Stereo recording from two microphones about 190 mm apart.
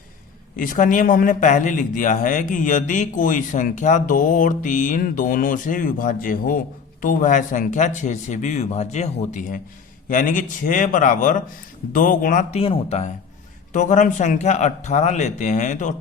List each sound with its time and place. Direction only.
0.5 s speech: 45° left (ahead or behind)